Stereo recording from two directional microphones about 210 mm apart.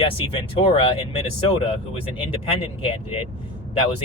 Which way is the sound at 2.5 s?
25° left (ahead or behind).